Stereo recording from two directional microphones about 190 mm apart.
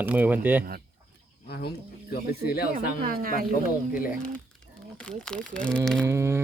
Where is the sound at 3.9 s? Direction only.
45° left (ahead or behind).